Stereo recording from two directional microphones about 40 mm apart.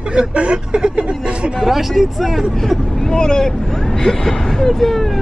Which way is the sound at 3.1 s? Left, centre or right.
Centre.